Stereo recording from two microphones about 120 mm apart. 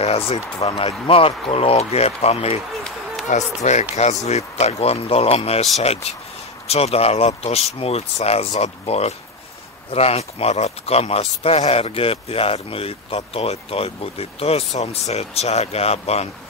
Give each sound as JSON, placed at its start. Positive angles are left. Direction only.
{"t": 0.0, "sound": "speech", "side_deg": 60}
{"t": 3.3, "sound": "speech", "side_deg": 75}
{"t": 4.3, "sound": "speech", "side_deg": 65}
{"t": 6.7, "sound": "speech", "side_deg": 55}